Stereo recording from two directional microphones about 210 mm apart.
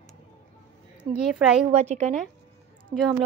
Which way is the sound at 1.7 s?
30° right (ahead or behind).